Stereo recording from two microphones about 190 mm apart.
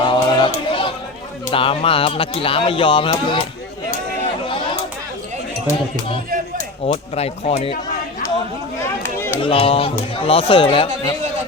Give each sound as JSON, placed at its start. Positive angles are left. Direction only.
{"t": 0.0, "sound": "a sound", "side_deg": 25}
{"t": 1.5, "sound": "speech", "side_deg": 30}
{"t": 6.8, "sound": "speech", "side_deg": 35}
{"t": 9.0, "sound": "run", "side_deg": 10}
{"t": 9.4, "sound": "speech", "side_deg": 30}